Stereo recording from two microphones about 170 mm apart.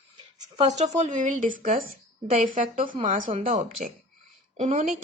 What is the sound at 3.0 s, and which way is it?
Speech, 50° right (ahead or behind).